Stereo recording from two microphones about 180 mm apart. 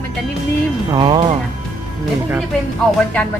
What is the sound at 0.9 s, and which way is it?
Speech, 25° right (ahead or behind).